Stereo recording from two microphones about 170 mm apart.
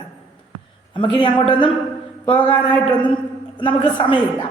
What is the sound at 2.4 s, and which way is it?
Speech, 10° left (ahead or behind).